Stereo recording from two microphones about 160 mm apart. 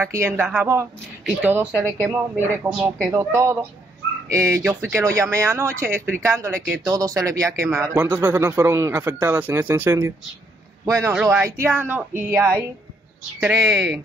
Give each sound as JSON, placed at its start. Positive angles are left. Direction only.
{"t": 0.0, "sound": "a man's voice", "side_deg": -15}
{"t": 2.7, "sound": "a man's voice", "side_deg": -5}
{"t": 4.6, "sound": "speech", "side_deg": -5}
{"t": 5.0, "sound": "a man's voice", "side_deg": -20}
{"t": 11.1, "sound": "a man's voice", "side_deg": -5}